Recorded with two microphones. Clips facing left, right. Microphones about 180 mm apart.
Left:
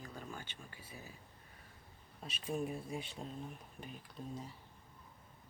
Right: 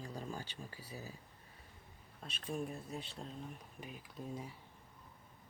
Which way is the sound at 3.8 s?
5° right (ahead or behind).